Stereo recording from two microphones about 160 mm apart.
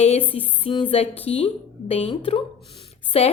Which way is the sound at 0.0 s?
40° left (ahead or behind).